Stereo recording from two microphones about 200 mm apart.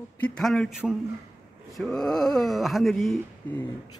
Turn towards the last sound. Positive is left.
turn(degrees=0)  # may be behind; listen again after turning